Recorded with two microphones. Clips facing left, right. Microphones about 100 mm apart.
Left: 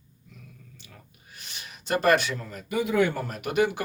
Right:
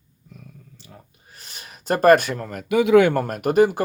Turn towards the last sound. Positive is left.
turn(degrees=-40)  # may be behind; listen again after turning